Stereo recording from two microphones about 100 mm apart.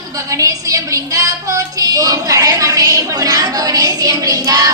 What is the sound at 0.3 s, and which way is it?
A woman's voice, 35° right (ahead or behind).